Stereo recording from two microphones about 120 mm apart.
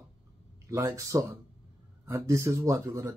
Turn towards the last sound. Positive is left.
turn(degrees=-25)  # may be behind; listen again after turning